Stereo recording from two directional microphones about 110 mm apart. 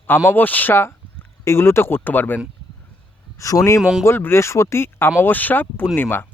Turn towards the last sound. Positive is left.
turn(degrees=20)  # may be behind; listen again after turning